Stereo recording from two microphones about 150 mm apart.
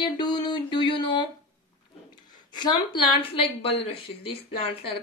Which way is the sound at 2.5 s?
30° left (ahead or behind).